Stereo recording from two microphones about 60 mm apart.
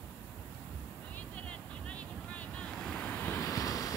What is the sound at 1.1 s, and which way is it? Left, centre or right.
Vehicle, left.